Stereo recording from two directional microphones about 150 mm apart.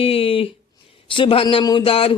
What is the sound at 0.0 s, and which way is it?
Speech, 40° left (ahead or behind).